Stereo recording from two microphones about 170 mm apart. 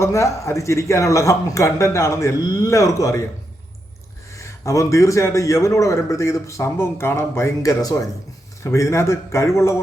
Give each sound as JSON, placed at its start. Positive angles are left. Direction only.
{"t": 0.0, "sound": "a man's voice", "side_deg": 15}
{"t": 4.4, "sound": "a man's voice", "side_deg": 15}